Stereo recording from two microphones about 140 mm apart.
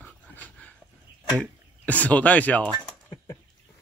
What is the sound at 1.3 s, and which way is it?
Speech, 10° left (ahead or behind).